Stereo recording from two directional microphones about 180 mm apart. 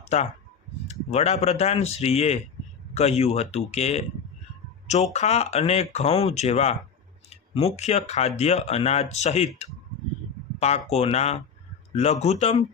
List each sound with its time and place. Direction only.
0.1 s speech: 35° left (ahead or behind)
5.1 s speech: 35° left (ahead or behind)
10.6 s speech: 35° left (ahead or behind)